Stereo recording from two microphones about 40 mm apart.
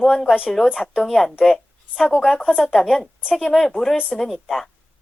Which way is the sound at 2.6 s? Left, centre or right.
Centre.